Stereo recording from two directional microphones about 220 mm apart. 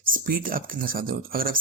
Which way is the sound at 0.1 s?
40° right (ahead or behind).